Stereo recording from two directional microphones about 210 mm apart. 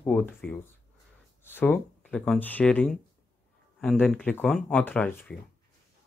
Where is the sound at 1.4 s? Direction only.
10° left (ahead or behind).